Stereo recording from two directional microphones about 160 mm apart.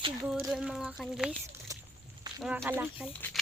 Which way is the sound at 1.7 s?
20° right (ahead or behind).